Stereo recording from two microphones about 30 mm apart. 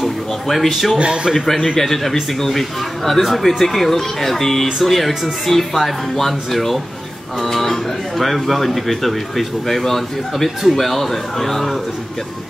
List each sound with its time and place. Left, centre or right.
0.0 s a man's voice: centre
0.9 s a man's voice: right
1.3 s speech: centre